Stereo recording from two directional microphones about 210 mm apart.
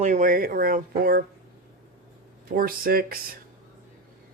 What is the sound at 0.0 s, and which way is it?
Speech, 35° right (ahead or behind).